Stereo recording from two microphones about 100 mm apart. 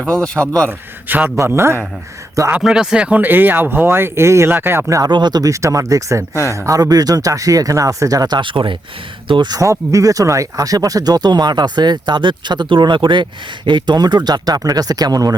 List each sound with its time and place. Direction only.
0.0 s speech: 10° left (ahead or behind)
1.0 s a man's voice: 20° right (ahead or behind)
2.5 s speech: 5° right (ahead or behind); by 5.1 s 35° right (ahead or behind)
5.1 s speech: 45° right (ahead or behind)
8.4 s speech: 55° right (ahead or behind)
9.5 s speech: 35° right (ahead or behind)